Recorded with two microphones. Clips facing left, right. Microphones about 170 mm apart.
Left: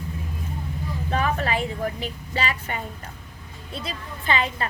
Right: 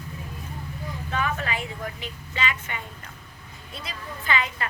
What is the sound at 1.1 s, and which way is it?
A woman's voice, 35° left (ahead or behind).